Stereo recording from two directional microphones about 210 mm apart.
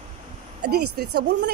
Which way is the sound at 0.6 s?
50° right (ahead or behind).